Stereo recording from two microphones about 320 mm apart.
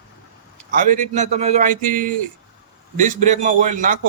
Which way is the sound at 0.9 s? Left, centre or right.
Right.